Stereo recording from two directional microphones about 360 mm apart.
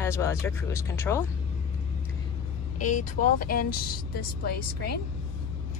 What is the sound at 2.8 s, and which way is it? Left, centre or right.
Speech, left.